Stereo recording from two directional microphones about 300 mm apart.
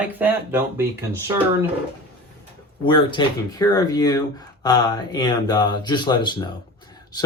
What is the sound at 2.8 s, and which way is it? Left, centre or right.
Speech, centre.